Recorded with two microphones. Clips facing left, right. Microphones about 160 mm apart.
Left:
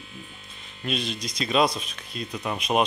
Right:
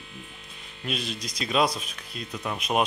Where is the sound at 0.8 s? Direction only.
5° right (ahead or behind).